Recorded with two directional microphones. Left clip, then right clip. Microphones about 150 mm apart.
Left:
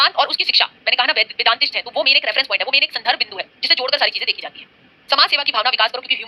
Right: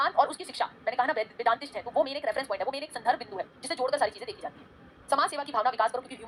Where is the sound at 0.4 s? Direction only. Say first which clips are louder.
Left 15 dB; 20° left (ahead or behind).